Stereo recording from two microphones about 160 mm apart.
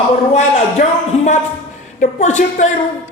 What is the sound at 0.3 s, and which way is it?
A woman's voice, 45° left (ahead or behind).